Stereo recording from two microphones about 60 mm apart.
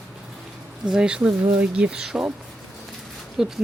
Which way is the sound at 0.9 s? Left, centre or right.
Centre.